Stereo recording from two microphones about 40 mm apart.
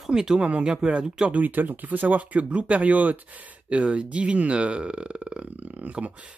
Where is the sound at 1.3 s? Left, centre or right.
Right.